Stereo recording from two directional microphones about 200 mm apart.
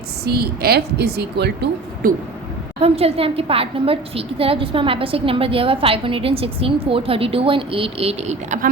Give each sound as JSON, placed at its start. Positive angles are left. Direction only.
{"t": 0.3, "sound": "a woman's voice", "side_deg": -50}
{"t": 2.8, "sound": "a woman's voice", "side_deg": -30}